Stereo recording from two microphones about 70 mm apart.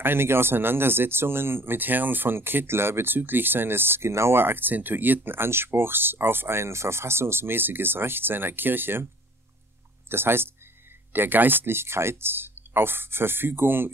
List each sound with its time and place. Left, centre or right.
0.0 s speech: right
10.0 s speech: right